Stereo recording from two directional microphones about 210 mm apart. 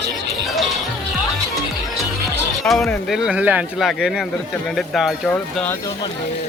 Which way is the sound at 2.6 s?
Centre (ahead or behind).